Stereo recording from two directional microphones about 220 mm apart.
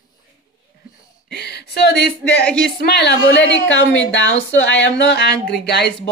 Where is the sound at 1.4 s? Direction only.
50° left (ahead or behind).